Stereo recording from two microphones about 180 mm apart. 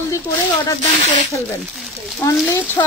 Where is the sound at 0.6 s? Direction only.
20° left (ahead or behind).